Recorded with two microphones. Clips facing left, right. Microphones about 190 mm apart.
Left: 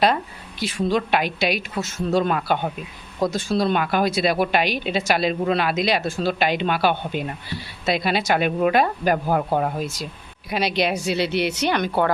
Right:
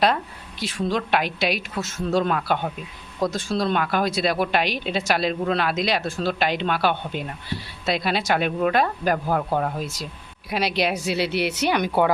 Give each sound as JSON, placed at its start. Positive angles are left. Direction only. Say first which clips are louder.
{"t": 0.6, "sound": "a woman's voice", "louder": "left 3 dB", "side_deg": 0}